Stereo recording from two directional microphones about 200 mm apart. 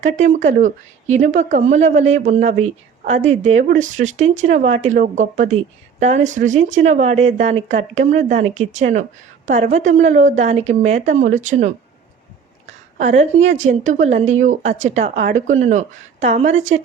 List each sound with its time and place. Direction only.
0.0 s speech: 35° right (ahead or behind)
12.6 s a sound: 35° right (ahead or behind)
13.5 s speech: 35° right (ahead or behind)